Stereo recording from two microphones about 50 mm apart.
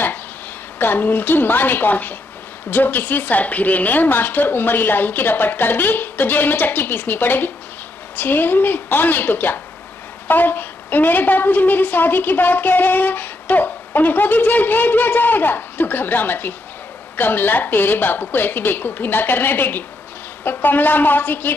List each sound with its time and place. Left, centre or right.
0.7 s a woman's voice: left